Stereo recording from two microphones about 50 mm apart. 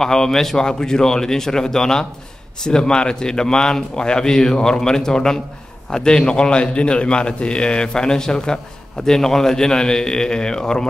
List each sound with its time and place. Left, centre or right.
0.0 s a man's voice: centre